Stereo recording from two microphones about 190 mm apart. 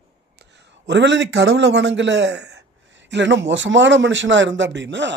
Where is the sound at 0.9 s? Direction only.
70° right (ahead or behind).